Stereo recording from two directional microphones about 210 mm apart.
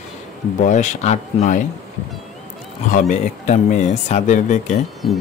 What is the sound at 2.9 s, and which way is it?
Speech, 35° left (ahead or behind).